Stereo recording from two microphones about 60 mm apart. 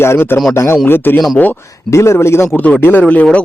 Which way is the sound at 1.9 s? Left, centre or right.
Left.